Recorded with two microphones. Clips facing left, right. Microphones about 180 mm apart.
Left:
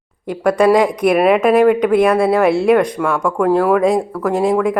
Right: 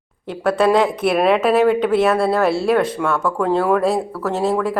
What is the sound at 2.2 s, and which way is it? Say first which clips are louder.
Speech: left 4 dB; 20° left (ahead or behind).